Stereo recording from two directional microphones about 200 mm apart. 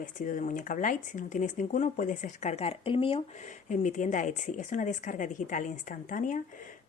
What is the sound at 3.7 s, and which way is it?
Speech, 40° left (ahead or behind).